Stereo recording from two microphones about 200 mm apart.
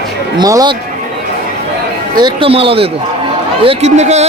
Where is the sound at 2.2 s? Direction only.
25° right (ahead or behind).